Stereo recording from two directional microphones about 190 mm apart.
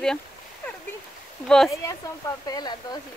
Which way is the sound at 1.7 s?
15° left (ahead or behind).